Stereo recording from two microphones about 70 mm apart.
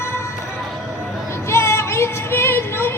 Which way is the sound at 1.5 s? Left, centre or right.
Left.